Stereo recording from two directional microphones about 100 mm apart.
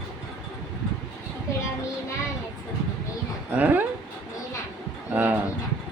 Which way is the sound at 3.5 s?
15° right (ahead or behind).